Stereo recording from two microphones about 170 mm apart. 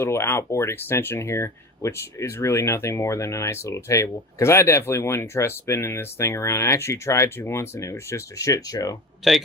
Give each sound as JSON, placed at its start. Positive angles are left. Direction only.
{"t": 0.0, "sound": "speech", "side_deg": 15}
{"t": 9.2, "sound": "speech", "side_deg": -5}